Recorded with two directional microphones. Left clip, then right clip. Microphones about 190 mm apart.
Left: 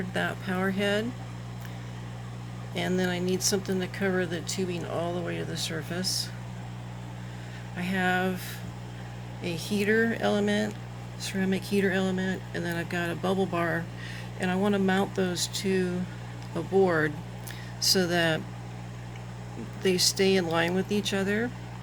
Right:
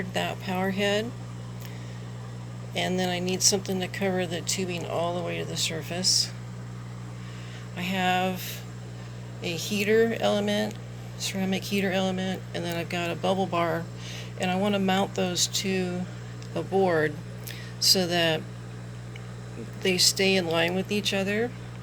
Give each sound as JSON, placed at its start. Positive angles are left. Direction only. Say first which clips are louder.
{"t": 0.1, "sound": "speech", "louder": "even", "side_deg": 25}
{"t": 2.7, "sound": "speech", "louder": "right 2 dB", "side_deg": 25}
{"t": 7.8, "sound": "speech", "louder": "right 2 dB", "side_deg": 20}
{"t": 19.8, "sound": "speech", "louder": "right 2 dB", "side_deg": 25}